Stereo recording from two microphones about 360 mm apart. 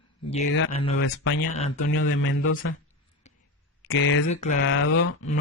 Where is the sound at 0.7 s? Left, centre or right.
Centre.